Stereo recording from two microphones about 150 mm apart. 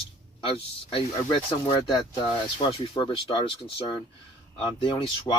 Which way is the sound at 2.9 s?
35° left (ahead or behind).